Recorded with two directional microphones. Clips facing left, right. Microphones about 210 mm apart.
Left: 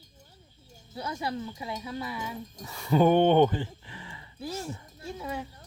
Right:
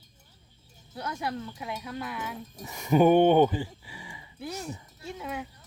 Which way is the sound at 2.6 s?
15° right (ahead or behind).